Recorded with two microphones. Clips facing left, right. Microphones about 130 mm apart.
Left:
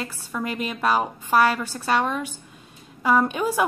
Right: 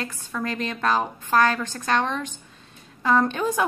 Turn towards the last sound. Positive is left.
turn(degrees=10)  # may be behind; listen again after turning